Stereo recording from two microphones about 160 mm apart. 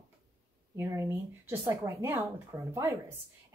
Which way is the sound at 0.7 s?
15° right (ahead or behind).